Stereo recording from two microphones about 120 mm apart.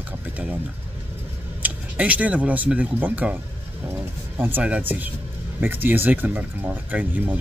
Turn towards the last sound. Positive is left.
turn(degrees=-15)  # may be behind; listen again after turning